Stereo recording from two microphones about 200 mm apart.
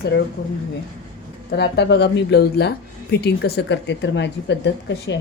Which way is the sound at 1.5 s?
55° left (ahead or behind).